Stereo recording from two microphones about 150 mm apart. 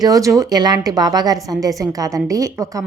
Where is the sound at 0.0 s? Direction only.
20° right (ahead or behind).